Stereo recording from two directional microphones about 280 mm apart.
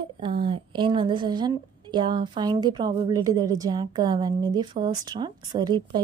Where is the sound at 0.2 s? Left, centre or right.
Centre.